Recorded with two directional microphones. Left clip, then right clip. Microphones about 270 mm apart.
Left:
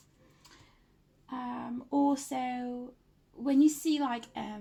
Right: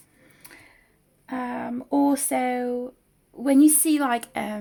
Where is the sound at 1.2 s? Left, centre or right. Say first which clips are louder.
Right 9 dB; right.